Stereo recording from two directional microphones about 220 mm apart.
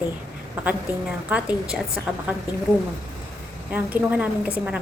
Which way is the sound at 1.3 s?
5° right (ahead or behind).